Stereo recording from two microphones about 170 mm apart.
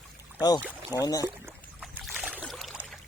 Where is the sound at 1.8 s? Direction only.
Centre (ahead or behind).